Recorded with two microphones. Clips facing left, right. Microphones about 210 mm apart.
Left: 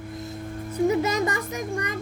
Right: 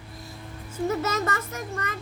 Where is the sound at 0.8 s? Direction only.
15° left (ahead or behind).